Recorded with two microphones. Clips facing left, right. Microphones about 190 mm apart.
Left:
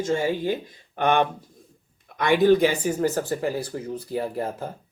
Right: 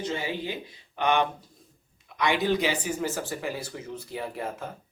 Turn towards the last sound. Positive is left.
turn(degrees=35)  # may be behind; listen again after turning